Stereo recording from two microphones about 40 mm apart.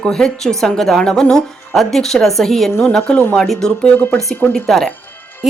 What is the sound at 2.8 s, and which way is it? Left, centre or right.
Speech, centre.